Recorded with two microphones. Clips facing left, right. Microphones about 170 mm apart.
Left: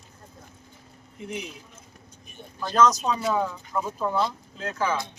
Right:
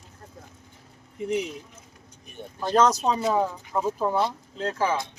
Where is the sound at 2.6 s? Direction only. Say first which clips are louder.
Right 1 dB; 30° right (ahead or behind).